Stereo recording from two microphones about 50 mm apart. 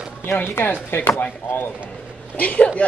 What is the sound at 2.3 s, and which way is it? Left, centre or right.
Speech, left.